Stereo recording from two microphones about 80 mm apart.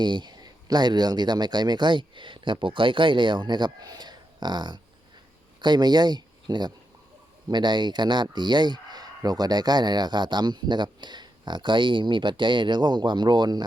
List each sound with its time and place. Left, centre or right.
0.0 s speech: right